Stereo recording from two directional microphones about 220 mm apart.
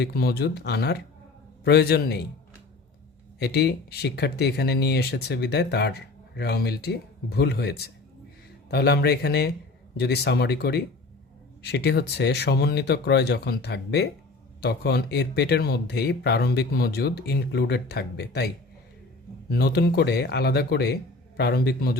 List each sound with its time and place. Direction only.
0.0 s speech: 45° left (ahead or behind)
3.3 s speech: 50° left (ahead or behind)